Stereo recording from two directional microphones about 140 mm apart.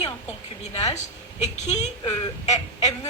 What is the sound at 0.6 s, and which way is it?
A woman's voice, 55° left (ahead or behind).